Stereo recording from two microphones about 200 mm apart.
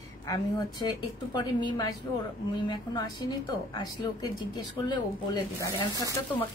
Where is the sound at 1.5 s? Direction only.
20° left (ahead or behind).